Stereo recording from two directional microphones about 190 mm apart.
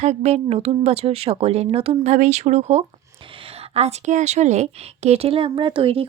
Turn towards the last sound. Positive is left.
turn(degrees=-30)  # may be behind; listen again after turning